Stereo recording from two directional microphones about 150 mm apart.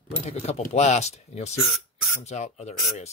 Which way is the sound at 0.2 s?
45° left (ahead or behind).